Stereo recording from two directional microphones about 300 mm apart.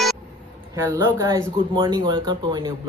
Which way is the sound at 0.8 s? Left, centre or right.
Centre.